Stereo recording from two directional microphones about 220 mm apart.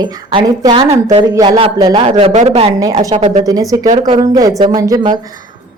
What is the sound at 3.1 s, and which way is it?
Speech, 30° right (ahead or behind).